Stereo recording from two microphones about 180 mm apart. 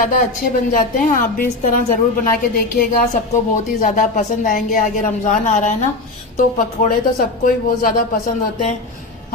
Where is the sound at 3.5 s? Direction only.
45° left (ahead or behind).